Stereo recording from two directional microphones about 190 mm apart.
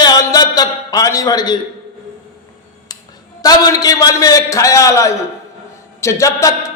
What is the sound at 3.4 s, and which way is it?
A man's voice, 20° left (ahead or behind).